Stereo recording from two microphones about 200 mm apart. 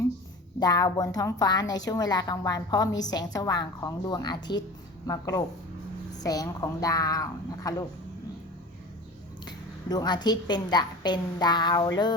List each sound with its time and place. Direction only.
0.6 s a woman's voice: 20° left (ahead or behind)
9.5 s a woman's voice: 20° left (ahead or behind)